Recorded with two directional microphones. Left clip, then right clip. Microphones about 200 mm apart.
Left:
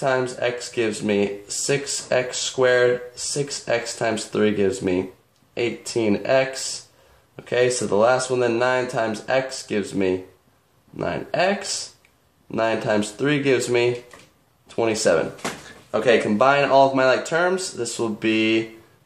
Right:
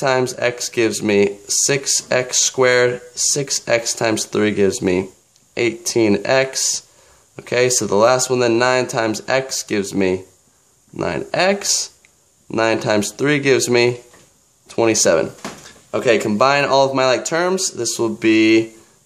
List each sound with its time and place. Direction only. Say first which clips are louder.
0.0 s speech: right 4 dB; 30° right (ahead or behind)